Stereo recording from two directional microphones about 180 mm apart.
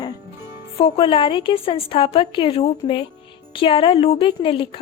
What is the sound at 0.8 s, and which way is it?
Speech, 30° left (ahead or behind).